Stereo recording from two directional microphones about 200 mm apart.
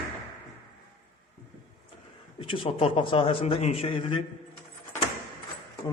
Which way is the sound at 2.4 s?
25° left (ahead or behind).